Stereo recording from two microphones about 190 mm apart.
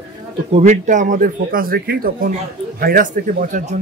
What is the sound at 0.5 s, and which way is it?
A man's voice, 35° right (ahead or behind).